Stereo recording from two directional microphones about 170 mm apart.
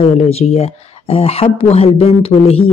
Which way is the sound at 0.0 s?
35° left (ahead or behind).